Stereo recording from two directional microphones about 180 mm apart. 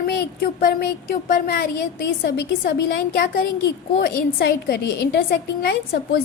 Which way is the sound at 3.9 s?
60° left (ahead or behind).